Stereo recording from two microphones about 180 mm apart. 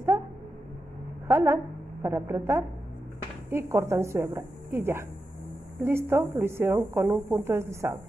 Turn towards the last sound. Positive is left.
turn(degrees=-15)  # may be behind; listen again after turning